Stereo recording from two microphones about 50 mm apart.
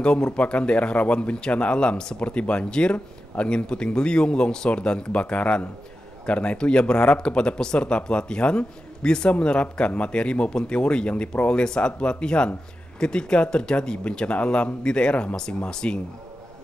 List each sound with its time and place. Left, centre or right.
0.0 s speech: centre